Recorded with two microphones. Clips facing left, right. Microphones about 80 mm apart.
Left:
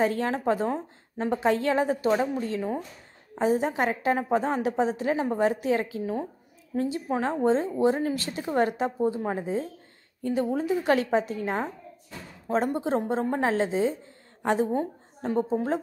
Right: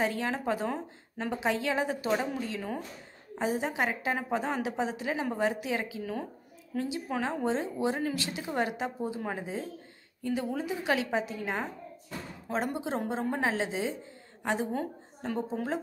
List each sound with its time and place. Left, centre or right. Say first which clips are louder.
0.0 s a woman's voice: left 5 dB; left
10.7 s a woman's voice: left 6 dB; left
14.7 s a woman's voice: left 5 dB; left